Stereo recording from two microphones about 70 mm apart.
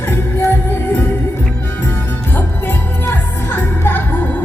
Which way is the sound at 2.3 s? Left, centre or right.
Left.